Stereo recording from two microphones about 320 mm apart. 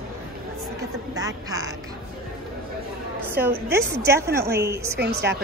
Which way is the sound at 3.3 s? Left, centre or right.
Centre.